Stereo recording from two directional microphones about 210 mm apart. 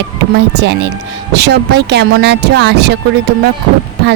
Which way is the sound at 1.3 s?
55° right (ahead or behind).